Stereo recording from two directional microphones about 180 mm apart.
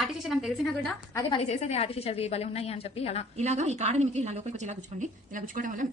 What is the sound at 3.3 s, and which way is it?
A woman's voice, 40° right (ahead or behind).